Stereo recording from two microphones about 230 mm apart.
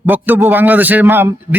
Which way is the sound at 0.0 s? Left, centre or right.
Centre.